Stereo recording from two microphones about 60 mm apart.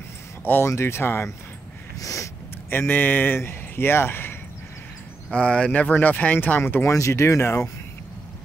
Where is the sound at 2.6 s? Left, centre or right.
Left.